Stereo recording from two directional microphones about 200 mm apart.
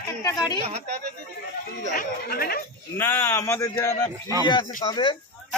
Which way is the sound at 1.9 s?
45° left (ahead or behind).